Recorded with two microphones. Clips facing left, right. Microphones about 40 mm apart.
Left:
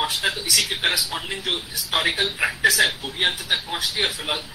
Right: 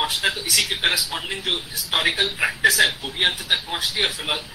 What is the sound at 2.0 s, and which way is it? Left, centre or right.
A man's voice, right.